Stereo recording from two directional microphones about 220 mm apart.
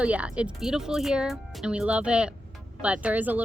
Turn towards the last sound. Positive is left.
turn(degrees=-5)  # may be behind; listen again after turning